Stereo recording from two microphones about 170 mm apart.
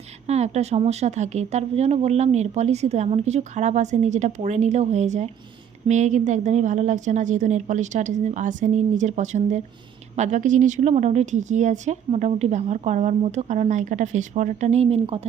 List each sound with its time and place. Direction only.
0.3 s speech: 40° right (ahead or behind)